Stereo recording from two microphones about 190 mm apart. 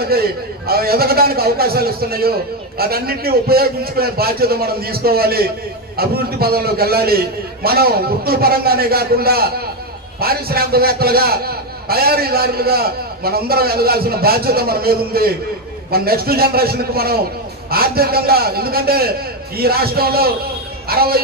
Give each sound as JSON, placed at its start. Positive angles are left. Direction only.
{"t": 0.0, "sound": "a man's voice", "side_deg": -55}